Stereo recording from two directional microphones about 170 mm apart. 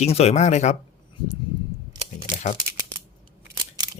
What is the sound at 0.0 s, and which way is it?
Speech, 40° left (ahead or behind).